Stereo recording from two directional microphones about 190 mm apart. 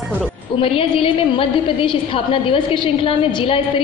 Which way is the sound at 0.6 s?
30° left (ahead or behind).